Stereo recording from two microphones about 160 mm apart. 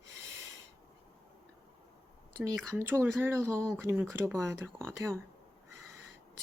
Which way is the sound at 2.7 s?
15° right (ahead or behind).